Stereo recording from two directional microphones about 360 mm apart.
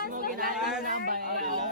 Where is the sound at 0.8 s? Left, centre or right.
Right.